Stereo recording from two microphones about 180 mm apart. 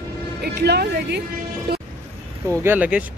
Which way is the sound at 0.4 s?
65° right (ahead or behind).